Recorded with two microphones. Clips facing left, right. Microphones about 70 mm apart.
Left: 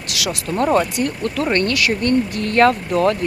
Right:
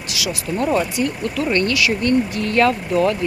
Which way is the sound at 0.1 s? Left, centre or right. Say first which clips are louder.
Left 1 dB; left.